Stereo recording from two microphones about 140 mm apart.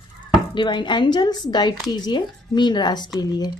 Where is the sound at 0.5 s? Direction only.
35° left (ahead or behind).